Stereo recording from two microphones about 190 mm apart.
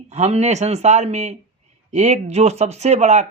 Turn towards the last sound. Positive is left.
turn(degrees=-35)  # may be behind; listen again after turning